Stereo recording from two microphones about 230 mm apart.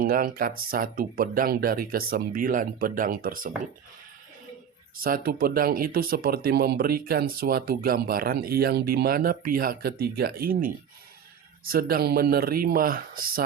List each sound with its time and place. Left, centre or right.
0.0 s speech: right
4.9 s speech: right